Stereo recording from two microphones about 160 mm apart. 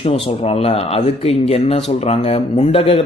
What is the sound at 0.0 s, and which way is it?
Speech, 40° left (ahead or behind).